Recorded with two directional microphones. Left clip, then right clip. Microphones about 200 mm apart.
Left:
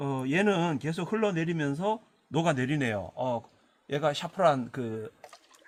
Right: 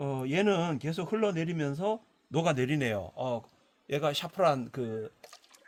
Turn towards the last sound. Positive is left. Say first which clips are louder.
# left 2 dB
turn(degrees=-25)  # may be behind; listen again after turning